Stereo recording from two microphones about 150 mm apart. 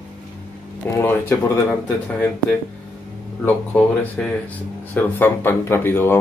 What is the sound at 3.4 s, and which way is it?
Speech, 10° left (ahead or behind).